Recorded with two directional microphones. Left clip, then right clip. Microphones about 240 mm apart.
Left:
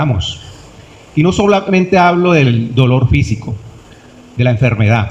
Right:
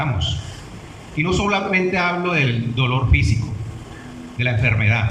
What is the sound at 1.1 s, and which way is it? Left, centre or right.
Speech, left.